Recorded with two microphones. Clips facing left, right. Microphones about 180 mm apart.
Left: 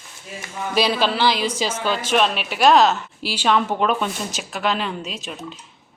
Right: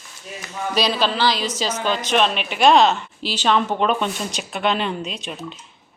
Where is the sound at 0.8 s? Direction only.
10° left (ahead or behind).